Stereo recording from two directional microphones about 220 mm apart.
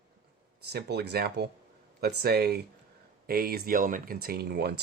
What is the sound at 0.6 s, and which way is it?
Speech, 50° right (ahead or behind).